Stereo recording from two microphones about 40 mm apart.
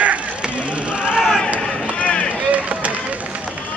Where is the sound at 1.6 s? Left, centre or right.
Left.